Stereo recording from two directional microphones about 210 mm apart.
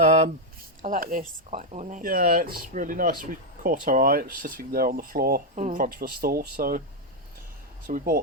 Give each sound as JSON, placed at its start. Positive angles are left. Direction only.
{"t": 0.8, "sound": "speech", "side_deg": -40}
{"t": 7.9, "sound": "speech", "side_deg": -40}